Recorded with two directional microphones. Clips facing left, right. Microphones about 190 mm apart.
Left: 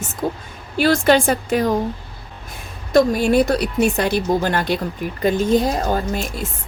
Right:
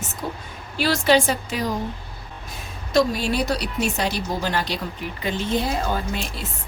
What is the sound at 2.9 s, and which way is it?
Speech, 50° left (ahead or behind).